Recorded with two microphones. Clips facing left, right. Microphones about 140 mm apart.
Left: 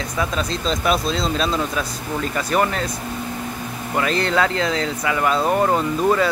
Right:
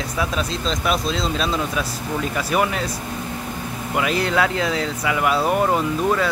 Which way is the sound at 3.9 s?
5° right (ahead or behind).